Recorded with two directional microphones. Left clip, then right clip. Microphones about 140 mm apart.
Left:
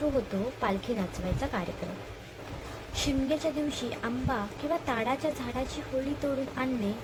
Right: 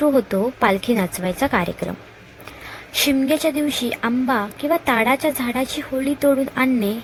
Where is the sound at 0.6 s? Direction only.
90° right.